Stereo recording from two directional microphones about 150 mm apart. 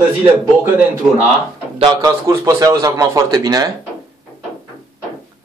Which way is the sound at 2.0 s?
20° right (ahead or behind).